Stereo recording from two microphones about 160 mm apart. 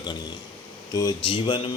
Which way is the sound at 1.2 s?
30° left (ahead or behind).